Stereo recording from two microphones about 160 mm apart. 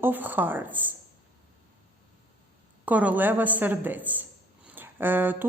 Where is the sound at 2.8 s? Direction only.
10° right (ahead or behind).